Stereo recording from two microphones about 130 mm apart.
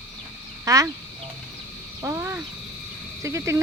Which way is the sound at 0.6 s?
25° right (ahead or behind).